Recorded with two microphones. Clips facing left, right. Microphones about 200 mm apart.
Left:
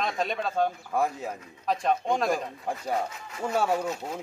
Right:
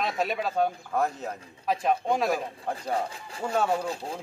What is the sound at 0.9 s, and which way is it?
Speech, 10° left (ahead or behind).